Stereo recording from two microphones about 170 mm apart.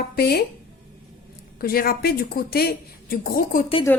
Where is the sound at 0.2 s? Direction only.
65° left (ahead or behind).